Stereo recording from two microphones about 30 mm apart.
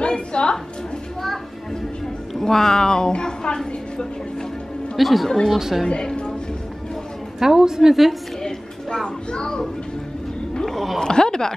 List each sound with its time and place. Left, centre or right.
0.0 s a sound: left
2.3 s speech: centre
3.1 s music: left
4.9 s speech: centre
5.6 s speech: centre
7.3 s speech: centre
7.9 s a woman's voice: centre
8.4 s a sound: centre
10.6 s a sound: centre
11.0 s speech: left